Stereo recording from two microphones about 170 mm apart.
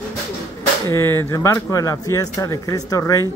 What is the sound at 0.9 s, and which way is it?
Speech, 15° left (ahead or behind).